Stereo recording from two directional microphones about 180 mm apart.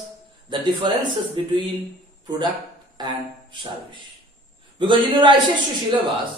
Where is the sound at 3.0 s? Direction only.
25° right (ahead or behind).